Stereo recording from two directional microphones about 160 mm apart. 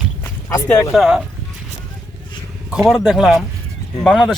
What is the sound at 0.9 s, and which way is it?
Speech, 5° right (ahead or behind).